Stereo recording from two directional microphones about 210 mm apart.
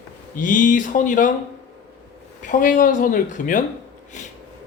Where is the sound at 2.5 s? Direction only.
40° left (ahead or behind).